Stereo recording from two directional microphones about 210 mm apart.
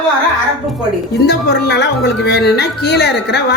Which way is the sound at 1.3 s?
50° left (ahead or behind).